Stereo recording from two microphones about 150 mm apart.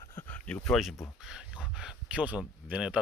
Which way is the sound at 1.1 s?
5° right (ahead or behind).